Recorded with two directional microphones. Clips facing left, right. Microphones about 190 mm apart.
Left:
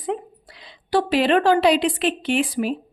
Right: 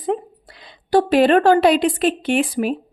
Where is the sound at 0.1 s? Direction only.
45° right (ahead or behind).